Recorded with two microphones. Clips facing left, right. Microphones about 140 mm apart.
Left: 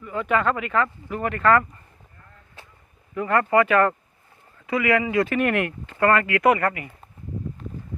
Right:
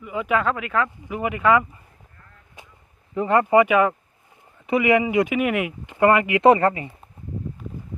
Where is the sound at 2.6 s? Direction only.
15° right (ahead or behind).